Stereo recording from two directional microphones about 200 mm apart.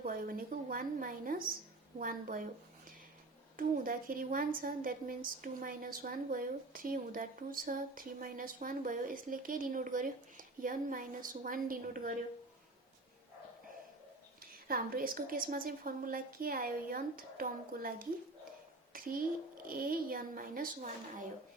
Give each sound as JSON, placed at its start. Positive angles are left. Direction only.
{"t": 0.0, "sound": "a woman's voice", "side_deg": -45}
{"t": 3.6, "sound": "a woman's voice", "side_deg": -45}
{"t": 14.7, "sound": "a woman's voice", "side_deg": -45}
{"t": 18.9, "sound": "a woman's voice", "side_deg": -45}